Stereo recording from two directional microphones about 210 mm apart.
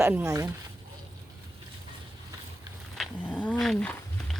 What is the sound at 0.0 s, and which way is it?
Speech, 10° right (ahead or behind).